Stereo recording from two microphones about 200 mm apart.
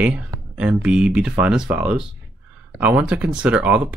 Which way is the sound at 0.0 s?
5° right (ahead or behind).